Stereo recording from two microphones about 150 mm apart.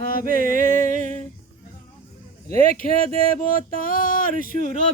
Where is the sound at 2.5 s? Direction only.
70° left (ahead or behind).